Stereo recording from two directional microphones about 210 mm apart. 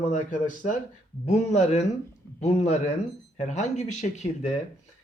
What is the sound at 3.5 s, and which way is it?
Speech, 35° left (ahead or behind).